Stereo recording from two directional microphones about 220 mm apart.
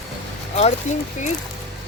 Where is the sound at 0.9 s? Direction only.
30° left (ahead or behind).